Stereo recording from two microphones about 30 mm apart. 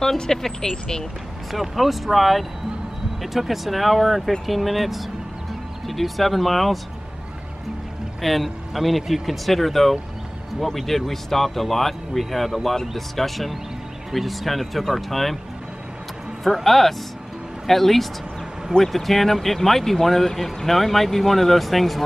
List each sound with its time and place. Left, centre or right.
0.3 s speech: centre
1.5 s speech: centre
8.2 s speech: centre
16.4 s speech: centre